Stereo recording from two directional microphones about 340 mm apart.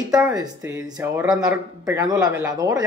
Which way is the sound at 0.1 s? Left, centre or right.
Centre.